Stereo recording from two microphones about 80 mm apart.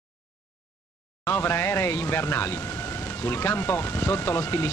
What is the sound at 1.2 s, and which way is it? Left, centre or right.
Speech, left.